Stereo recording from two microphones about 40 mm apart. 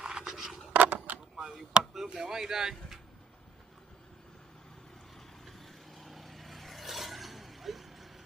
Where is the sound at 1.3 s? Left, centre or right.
Centre.